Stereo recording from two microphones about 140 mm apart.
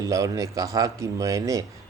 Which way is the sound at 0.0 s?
25° right (ahead or behind).